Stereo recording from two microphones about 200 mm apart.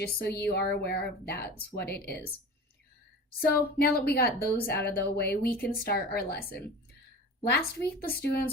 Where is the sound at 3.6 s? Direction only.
50° left (ahead or behind).